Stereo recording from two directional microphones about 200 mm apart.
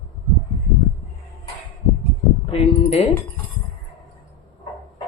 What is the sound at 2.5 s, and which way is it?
Speech, 30° left (ahead or behind).